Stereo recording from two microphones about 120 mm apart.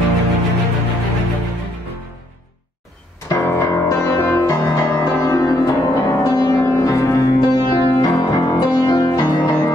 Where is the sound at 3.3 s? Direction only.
20° left (ahead or behind).